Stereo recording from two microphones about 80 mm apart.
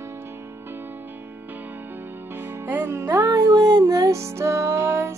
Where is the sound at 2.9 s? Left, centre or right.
Right.